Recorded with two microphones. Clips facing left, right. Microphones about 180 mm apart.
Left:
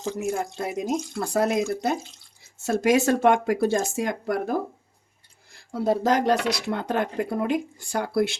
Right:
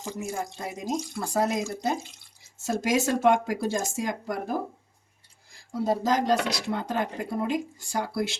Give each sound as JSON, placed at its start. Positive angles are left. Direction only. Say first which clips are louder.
{"t": 0.3, "sound": "speech", "louder": "left 6 dB", "side_deg": 65}
{"t": 5.5, "sound": "speech", "louder": "left 3 dB", "side_deg": 65}